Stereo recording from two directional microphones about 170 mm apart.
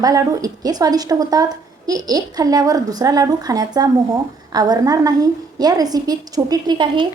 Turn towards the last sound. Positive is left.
turn(degrees=-25)  # may be behind; listen again after turning